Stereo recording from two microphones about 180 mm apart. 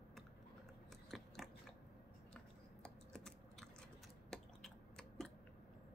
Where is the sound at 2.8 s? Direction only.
5° left (ahead or behind).